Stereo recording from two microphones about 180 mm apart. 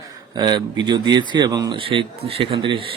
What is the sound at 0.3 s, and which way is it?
A man's voice, 25° right (ahead or behind).